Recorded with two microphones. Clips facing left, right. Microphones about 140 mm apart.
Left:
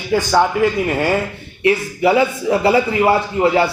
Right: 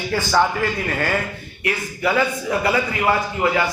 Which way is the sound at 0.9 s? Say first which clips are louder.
Left 5 dB; 25° left (ahead or behind).